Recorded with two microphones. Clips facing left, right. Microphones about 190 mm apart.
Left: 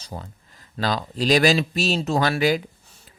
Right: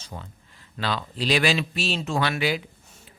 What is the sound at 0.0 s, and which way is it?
Speech, 35° left (ahead or behind).